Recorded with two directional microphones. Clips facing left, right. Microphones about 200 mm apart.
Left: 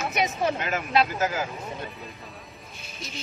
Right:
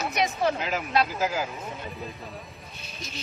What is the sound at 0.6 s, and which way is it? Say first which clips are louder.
Speech: left 1 dB; 5° right (ahead or behind).